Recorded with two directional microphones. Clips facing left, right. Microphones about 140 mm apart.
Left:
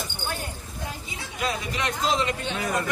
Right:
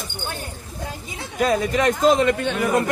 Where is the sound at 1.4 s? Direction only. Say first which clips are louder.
Right 10 dB; 50° right (ahead or behind).